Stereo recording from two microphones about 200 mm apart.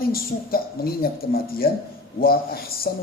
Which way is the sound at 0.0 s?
50° left (ahead or behind).